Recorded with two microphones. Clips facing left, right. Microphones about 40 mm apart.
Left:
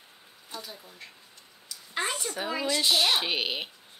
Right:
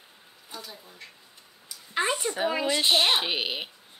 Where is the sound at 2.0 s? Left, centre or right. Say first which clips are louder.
Right 4 dB; right.